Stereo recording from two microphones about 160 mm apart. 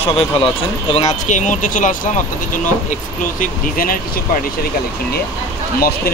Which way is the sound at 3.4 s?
65° left (ahead or behind).